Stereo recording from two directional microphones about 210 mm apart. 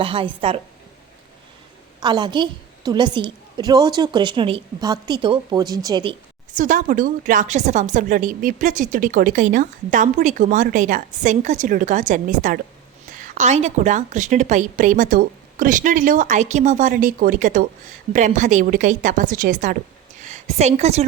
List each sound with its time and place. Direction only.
0.0 s a woman's voice: 25° right (ahead or behind)
2.0 s a woman's voice: 20° right (ahead or behind)
6.6 s a woman's voice: 35° right (ahead or behind)